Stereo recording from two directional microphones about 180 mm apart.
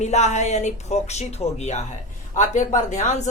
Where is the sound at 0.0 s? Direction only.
40° left (ahead or behind).